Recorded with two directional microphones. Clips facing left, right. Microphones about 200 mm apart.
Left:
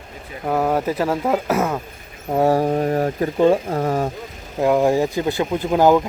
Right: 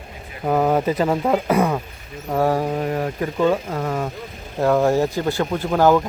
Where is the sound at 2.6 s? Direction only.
40° left (ahead or behind).